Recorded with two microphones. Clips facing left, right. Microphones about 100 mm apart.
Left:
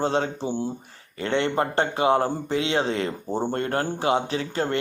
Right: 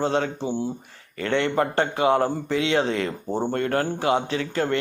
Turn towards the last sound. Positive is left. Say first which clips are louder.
# right 2 dB
turn(degrees=30)  # may be behind; listen again after turning